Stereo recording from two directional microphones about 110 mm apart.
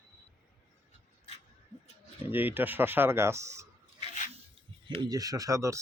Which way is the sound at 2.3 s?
15° right (ahead or behind).